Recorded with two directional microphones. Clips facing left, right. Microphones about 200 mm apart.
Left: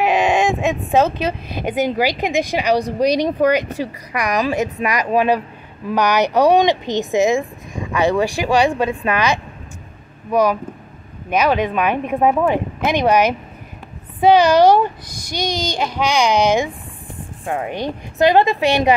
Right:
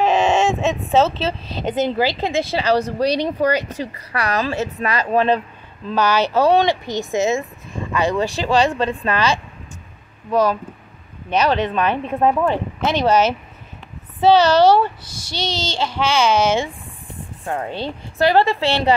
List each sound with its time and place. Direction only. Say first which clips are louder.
0.0 s speech: even; 10° left (ahead or behind)